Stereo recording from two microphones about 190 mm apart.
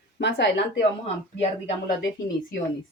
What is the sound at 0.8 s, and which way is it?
Speech, 35° left (ahead or behind).